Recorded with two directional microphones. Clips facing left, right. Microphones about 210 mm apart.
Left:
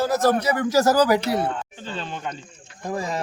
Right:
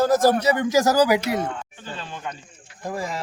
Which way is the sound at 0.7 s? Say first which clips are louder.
Left 1 dB; 15° right (ahead or behind).